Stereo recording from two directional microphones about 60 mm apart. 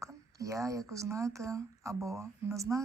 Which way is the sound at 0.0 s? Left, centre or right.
Right.